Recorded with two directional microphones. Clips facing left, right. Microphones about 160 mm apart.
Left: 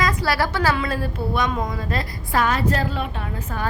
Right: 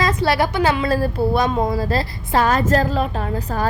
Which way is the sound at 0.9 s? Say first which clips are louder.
Right 7 dB; 35° right (ahead or behind).